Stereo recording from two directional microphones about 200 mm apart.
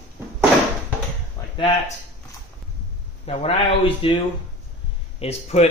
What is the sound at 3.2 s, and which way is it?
A man's voice, 30° left (ahead or behind).